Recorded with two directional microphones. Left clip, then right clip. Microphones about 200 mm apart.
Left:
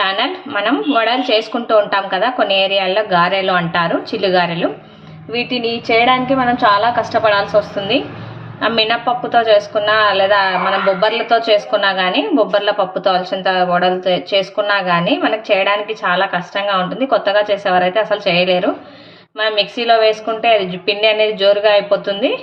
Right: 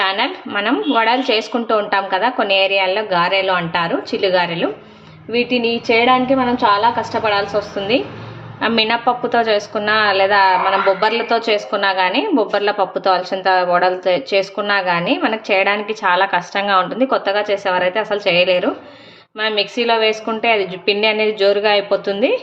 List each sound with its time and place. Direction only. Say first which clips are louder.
0.0 s a woman's voice: left 1 dB; 10° right (ahead or behind)